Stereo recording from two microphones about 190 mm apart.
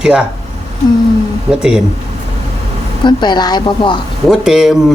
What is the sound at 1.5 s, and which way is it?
Speech, 5° right (ahead or behind).